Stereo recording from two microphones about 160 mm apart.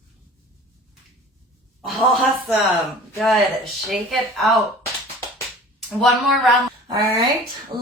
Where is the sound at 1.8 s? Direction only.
Centre (ahead or behind).